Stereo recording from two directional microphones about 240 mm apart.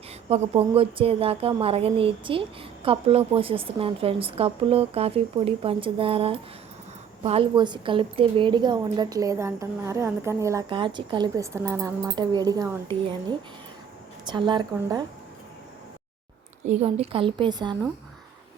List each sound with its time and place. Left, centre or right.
0.3 s a woman's voice: right
14.3 s speech: centre
16.6 s speech: right